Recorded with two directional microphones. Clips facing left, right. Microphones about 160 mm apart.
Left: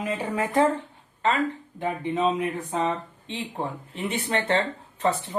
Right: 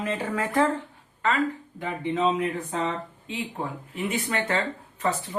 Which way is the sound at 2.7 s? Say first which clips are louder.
Left 2 dB; 20° left (ahead or behind).